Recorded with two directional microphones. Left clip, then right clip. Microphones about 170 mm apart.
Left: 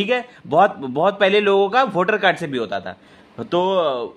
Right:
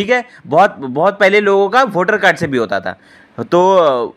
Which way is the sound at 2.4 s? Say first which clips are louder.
Right 8 dB; 30° right (ahead or behind).